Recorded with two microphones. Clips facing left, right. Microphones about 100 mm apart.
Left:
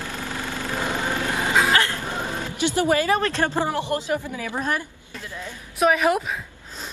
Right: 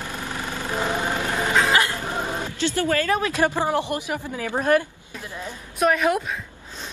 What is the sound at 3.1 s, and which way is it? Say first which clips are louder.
Speech: even; 10° right (ahead or behind).